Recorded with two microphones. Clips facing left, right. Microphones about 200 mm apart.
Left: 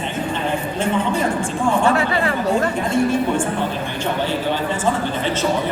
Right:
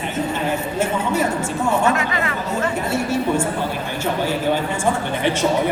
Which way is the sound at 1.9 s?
35° left (ahead or behind).